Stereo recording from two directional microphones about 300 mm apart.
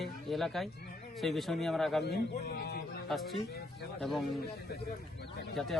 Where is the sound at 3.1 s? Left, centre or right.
Centre.